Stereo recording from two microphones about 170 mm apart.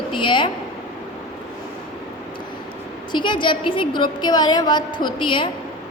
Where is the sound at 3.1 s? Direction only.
25° left (ahead or behind).